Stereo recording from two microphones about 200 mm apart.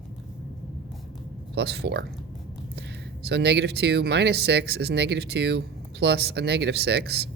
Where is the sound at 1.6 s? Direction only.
55° right (ahead or behind).